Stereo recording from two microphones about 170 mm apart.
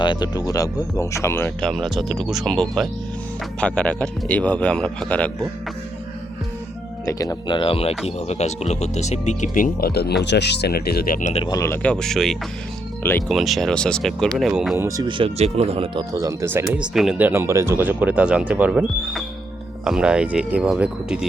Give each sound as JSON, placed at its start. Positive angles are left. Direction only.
{"t": 0.0, "sound": "speech", "side_deg": 25}
{"t": 1.6, "sound": "a man's voice", "side_deg": 0}
{"t": 7.0, "sound": "speech", "side_deg": 20}
{"t": 11.4, "sound": "speech", "side_deg": 20}
{"t": 13.0, "sound": "speech", "side_deg": 15}
{"t": 13.2, "sound": "speech", "side_deg": 0}
{"t": 14.8, "sound": "speech", "side_deg": -20}
{"t": 15.2, "sound": "speech", "side_deg": -40}
{"t": 16.1, "sound": "speech", "side_deg": -15}